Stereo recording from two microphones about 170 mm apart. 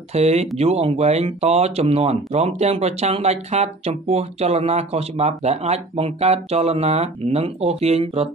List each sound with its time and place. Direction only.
0.1 s speech: 40° right (ahead or behind)